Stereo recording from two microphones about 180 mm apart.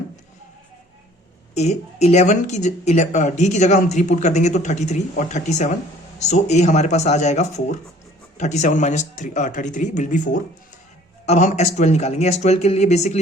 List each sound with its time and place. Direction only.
1.5 s speech: 40° left (ahead or behind)